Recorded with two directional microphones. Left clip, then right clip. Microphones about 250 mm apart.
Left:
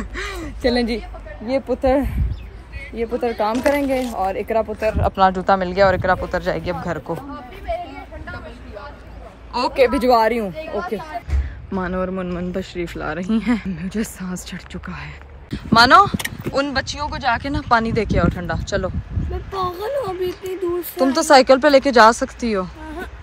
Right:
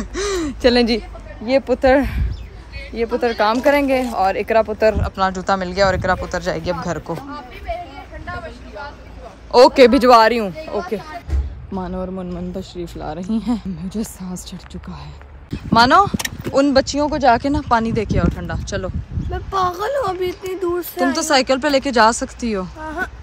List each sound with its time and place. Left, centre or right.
0.0 s a sound: centre
0.3 s a sound: right
0.7 s a child's voice: right
1.4 s speech: centre
9.5 s a man's voice: centre
15.5 s speech: centre
16.5 s speech: right
19.5 s a child's voice: right
20.9 s speech: centre